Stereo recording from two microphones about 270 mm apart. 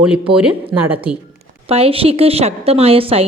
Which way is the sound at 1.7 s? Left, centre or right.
Right.